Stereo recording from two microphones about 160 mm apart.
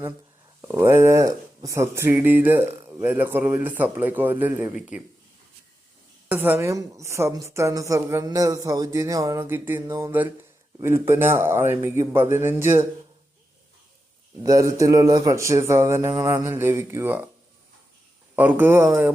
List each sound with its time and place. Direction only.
0.6 s speech: 20° right (ahead or behind)
6.2 s a woman's voice: 10° right (ahead or behind)
14.4 s a woman's voice: 20° right (ahead or behind)
18.3 s speech: 10° right (ahead or behind)